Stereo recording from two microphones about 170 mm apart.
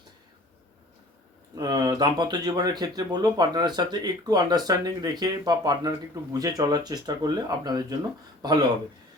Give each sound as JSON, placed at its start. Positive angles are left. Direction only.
{"t": 1.5, "sound": "speech", "side_deg": -25}